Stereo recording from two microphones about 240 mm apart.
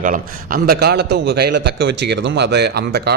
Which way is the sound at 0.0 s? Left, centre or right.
Right.